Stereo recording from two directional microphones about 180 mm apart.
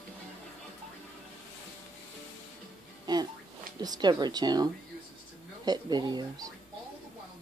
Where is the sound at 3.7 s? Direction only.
20° right (ahead or behind).